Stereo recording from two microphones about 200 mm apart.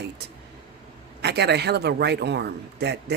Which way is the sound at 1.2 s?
55° right (ahead or behind).